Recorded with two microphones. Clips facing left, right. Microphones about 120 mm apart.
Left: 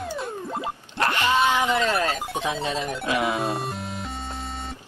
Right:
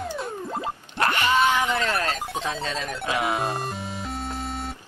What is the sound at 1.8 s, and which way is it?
Speech, 25° left (ahead or behind).